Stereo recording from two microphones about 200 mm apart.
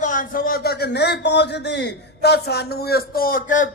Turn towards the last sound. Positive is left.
turn(degrees=40)  # may be behind; listen again after turning